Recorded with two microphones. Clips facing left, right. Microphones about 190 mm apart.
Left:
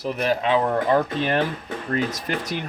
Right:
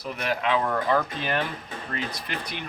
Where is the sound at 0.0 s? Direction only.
30° left (ahead or behind).